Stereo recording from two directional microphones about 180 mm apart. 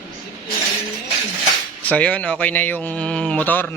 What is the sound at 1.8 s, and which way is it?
Speech, 10° left (ahead or behind).